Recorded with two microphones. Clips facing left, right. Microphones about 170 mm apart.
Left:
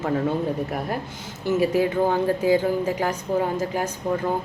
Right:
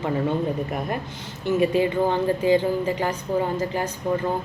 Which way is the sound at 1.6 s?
5° left (ahead or behind).